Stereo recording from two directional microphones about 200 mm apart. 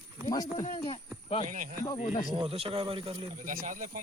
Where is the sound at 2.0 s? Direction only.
40° left (ahead or behind).